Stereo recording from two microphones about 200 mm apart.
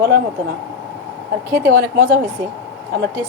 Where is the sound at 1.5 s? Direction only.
50° right (ahead or behind).